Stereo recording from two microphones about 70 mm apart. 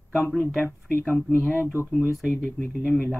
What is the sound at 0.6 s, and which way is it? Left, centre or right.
Speech, left.